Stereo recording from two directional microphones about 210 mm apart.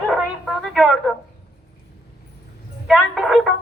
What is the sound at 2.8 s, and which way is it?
Speech, centre (ahead or behind).